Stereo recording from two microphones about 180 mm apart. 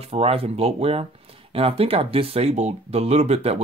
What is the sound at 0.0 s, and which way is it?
Speech, 35° right (ahead or behind).